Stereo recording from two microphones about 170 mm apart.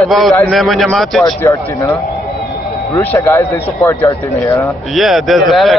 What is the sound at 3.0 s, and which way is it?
Speech, 10° left (ahead or behind).